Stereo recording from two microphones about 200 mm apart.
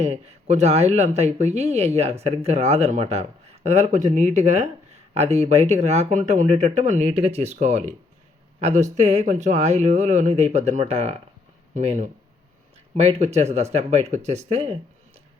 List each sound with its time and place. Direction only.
0.0 s speech: 35° right (ahead or behind)